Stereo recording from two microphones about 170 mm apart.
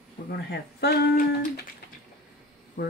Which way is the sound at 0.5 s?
75° left (ahead or behind).